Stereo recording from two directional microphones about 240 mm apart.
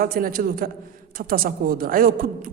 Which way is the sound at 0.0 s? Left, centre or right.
Right.